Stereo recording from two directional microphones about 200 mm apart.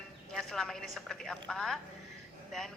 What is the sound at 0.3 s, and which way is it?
A woman's voice, centre (ahead or behind).